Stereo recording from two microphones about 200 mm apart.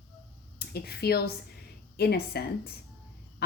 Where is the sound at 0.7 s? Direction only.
50° left (ahead or behind).